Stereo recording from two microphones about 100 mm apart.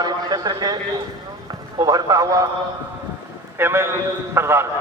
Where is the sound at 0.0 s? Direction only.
40° right (ahead or behind).